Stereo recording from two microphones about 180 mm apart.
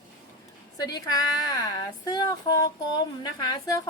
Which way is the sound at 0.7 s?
20° left (ahead or behind).